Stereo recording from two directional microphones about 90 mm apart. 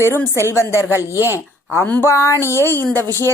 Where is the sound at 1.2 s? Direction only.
25° right (ahead or behind).